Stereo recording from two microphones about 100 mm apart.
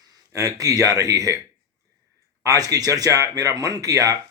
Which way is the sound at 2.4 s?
35° right (ahead or behind).